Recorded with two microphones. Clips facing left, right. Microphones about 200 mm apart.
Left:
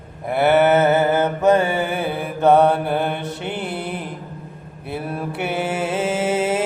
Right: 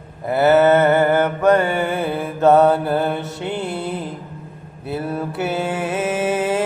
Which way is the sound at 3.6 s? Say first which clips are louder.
Right 2 dB; 25° right (ahead or behind).